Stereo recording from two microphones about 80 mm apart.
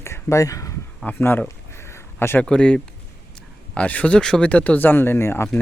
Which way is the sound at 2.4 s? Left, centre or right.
Centre.